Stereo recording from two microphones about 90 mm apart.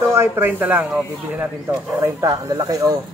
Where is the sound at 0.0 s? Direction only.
30° right (ahead or behind).